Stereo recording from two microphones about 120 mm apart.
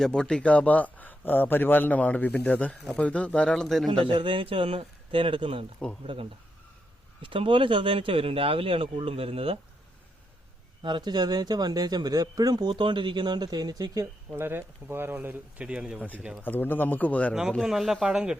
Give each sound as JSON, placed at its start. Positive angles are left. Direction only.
{"t": 0.0, "sound": "speech", "side_deg": 5}
{"t": 3.8, "sound": "speech", "side_deg": -45}
{"t": 10.8, "sound": "speech", "side_deg": -40}
{"t": 16.0, "sound": "speech", "side_deg": 15}
{"t": 17.6, "sound": "speech", "side_deg": -5}